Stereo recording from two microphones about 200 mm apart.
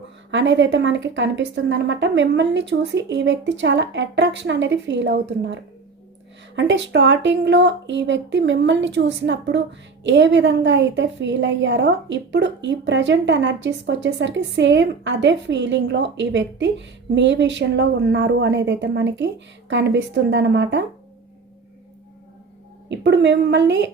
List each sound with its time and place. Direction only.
0.3 s speech: 65° right (ahead or behind)
6.6 s speech: 65° right (ahead or behind)
22.9 s speech: 60° right (ahead or behind)